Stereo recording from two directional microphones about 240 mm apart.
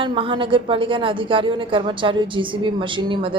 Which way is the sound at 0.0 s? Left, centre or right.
Right.